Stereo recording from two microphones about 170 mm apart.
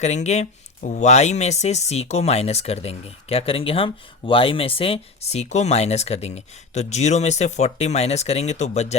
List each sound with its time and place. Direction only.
0.0 s speech: 40° left (ahead or behind)